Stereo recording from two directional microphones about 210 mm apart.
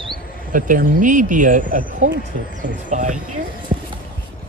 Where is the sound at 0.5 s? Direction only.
40° right (ahead or behind).